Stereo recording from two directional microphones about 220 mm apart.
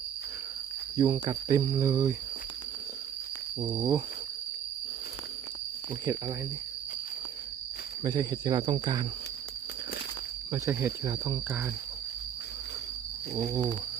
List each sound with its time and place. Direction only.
0.9 s speech: 20° right (ahead or behind)
3.6 s speech: 20° right (ahead or behind)
8.0 s speech: 20° right (ahead or behind)
10.5 s speech: 10° right (ahead or behind)
13.3 s speech: 10° right (ahead or behind)